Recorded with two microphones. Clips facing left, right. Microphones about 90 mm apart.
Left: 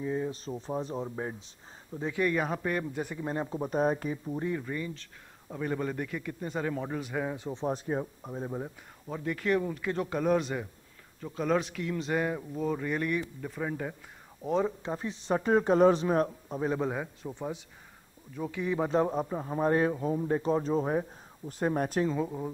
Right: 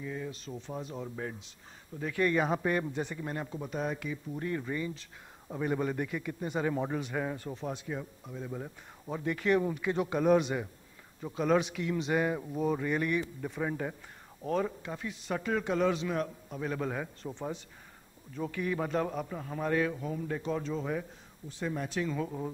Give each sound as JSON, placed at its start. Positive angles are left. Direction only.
{"t": 0.0, "sound": "speech", "side_deg": 30}
{"t": 2.2, "sound": "a man's voice", "side_deg": 0}
{"t": 2.9, "sound": "speech", "side_deg": 10}
{"t": 3.3, "sound": "a man's voice", "side_deg": 25}
{"t": 4.5, "sound": "a man's voice", "side_deg": 0}
{"t": 7.0, "sound": "a man's voice", "side_deg": 5}
{"t": 7.5, "sound": "a man's voice", "side_deg": 35}
{"t": 9.0, "sound": "a man's voice", "side_deg": -5}
{"t": 14.4, "sound": "speech", "side_deg": 20}
{"t": 14.8, "sound": "a man's voice", "side_deg": 30}